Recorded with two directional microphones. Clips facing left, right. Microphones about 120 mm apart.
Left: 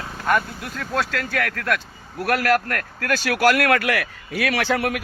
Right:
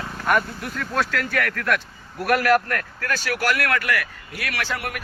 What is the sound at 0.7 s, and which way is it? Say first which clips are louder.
Speech: even; 25° left (ahead or behind).